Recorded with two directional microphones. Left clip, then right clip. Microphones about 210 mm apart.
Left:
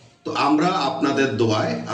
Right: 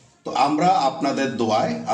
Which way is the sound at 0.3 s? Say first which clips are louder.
Right 2 dB; 50° right (ahead or behind).